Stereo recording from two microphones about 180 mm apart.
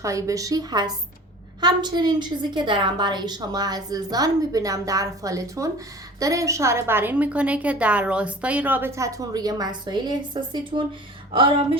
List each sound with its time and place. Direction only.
0.0 s a woman's voice: 15° right (ahead or behind)